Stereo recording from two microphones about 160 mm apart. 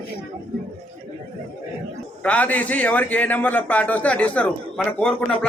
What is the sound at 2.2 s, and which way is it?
A man's voice, 10° left (ahead or behind).